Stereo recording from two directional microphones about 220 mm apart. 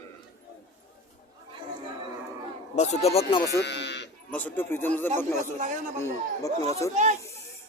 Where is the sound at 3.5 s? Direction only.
50° left (ahead or behind).